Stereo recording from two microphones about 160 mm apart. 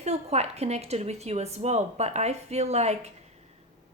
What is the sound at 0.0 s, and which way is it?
Speech, 40° right (ahead or behind).